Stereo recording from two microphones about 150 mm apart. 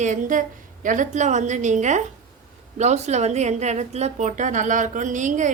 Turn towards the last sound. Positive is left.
turn(degrees=-55)  # may be behind; listen again after turning